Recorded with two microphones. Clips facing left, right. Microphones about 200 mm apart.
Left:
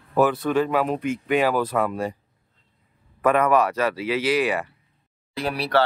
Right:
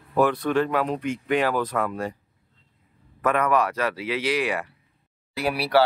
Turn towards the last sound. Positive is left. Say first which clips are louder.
# right 1 dB
turn(degrees=-10)  # may be behind; listen again after turning